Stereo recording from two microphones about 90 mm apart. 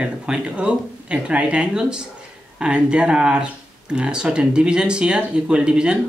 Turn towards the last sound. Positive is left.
turn(degrees=-10)  # may be behind; listen again after turning